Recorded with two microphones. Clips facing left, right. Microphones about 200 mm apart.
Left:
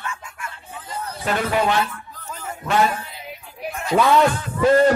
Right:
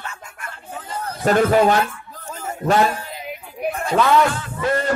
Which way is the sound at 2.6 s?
40° right (ahead or behind).